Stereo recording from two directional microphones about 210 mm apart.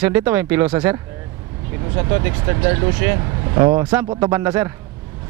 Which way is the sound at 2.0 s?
20° right (ahead or behind).